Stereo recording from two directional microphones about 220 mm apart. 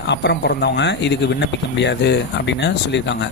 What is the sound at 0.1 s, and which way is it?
Speech, 50° left (ahead or behind).